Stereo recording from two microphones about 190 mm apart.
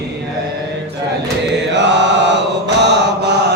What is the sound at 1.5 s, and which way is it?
Mantra, 65° right (ahead or behind).